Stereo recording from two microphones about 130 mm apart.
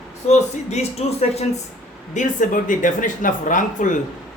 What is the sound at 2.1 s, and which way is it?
Speech, 75° left (ahead or behind).